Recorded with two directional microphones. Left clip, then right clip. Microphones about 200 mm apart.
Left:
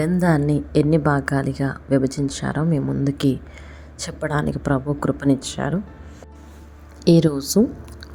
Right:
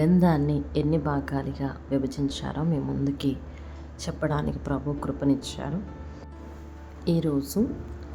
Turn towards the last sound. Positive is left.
turn(degrees=35)  # may be behind; listen again after turning